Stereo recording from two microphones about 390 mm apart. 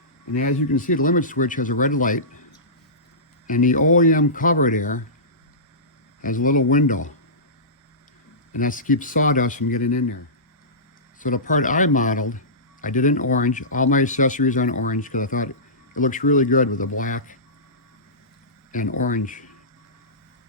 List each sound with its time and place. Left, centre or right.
0.8 s speech: left
3.4 s speech: left
6.2 s speech: centre
8.5 s speech: centre
11.2 s speech: centre
18.7 s speech: centre